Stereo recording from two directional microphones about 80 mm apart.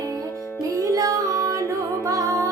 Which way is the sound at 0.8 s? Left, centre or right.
Right.